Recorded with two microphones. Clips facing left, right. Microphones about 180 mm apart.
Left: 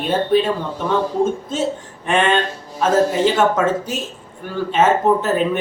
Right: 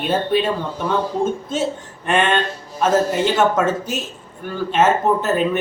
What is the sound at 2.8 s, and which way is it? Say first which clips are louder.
Speech: left 1 dB; 5° right (ahead or behind).